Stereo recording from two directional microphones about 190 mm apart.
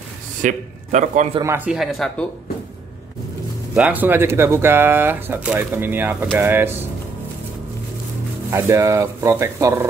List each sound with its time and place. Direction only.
0.4 s a man's voice: 40° right (ahead or behind)
1.4 s speech: 15° right (ahead or behind)
1.7 s speech: centre (ahead or behind)
3.7 s speech: 5° right (ahead or behind)
8.5 s speech: 15° right (ahead or behind)